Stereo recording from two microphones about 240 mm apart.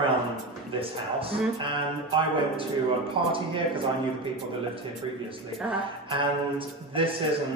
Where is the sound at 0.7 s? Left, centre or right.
Right.